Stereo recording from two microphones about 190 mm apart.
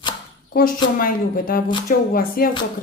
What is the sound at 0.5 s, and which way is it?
A woman's voice, 50° left (ahead or behind).